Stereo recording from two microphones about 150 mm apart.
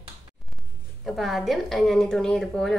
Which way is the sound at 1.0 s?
Centre (ahead or behind).